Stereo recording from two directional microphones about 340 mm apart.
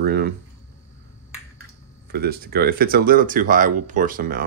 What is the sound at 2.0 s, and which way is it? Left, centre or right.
Speech, right.